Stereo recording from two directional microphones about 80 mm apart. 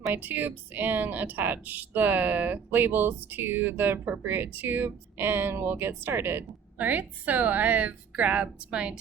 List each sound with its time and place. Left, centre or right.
0.1 s a woman's voice: right